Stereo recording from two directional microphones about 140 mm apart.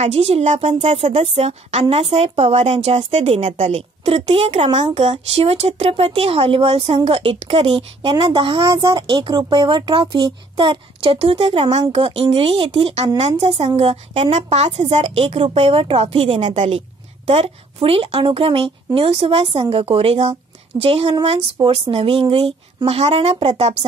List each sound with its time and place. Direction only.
0.0 s a woman's voice: 45° right (ahead or behind)